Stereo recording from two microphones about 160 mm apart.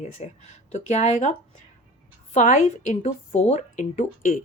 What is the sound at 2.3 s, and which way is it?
Speech, 50° left (ahead or behind).